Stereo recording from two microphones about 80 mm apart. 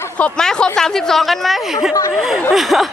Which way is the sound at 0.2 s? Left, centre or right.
Centre.